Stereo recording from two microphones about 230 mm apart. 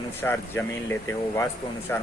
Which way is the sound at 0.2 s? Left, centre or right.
Centre.